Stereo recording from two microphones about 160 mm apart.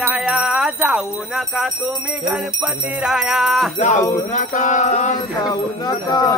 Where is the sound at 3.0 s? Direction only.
5° right (ahead or behind).